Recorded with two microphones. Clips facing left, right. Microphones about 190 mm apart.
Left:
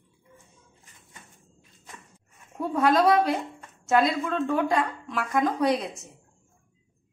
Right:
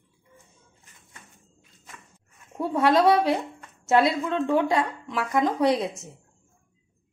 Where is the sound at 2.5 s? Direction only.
25° right (ahead or behind).